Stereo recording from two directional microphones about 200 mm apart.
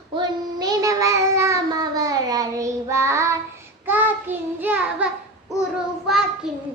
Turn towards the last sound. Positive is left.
turn(degrees=0)  # may be behind; listen again after turning